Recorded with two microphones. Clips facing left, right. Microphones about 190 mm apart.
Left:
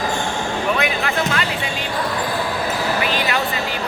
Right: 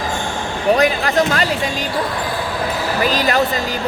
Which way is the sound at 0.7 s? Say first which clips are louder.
Right 9 dB; 40° right (ahead or behind).